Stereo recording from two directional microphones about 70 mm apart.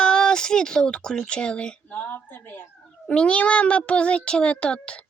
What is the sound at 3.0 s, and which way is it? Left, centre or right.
A child's voice, centre.